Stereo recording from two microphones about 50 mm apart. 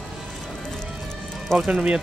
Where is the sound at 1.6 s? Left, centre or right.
Right.